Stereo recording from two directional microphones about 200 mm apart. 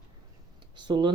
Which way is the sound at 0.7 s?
20° right (ahead or behind).